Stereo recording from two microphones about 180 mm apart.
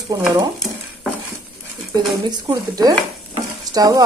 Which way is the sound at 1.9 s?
25° right (ahead or behind).